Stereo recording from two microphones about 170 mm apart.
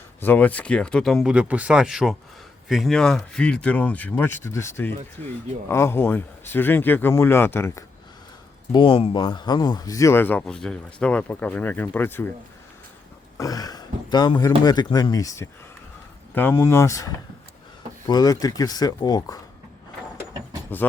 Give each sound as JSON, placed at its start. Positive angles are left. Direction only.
{"t": 0.2, "sound": "speech", "side_deg": 10}
{"t": 8.7, "sound": "speech", "side_deg": 30}
{"t": 13.4, "sound": "speech", "side_deg": 20}
{"t": 20.7, "sound": "speech", "side_deg": 10}